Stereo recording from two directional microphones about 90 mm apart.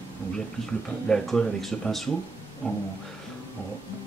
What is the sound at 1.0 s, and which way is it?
Speech, 5° left (ahead or behind).